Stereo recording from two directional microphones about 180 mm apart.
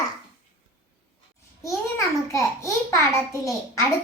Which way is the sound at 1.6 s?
15° left (ahead or behind).